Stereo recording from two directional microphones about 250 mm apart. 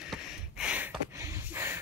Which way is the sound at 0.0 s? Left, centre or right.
Centre.